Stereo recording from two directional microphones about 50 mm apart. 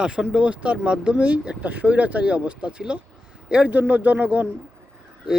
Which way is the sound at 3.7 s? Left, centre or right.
Right.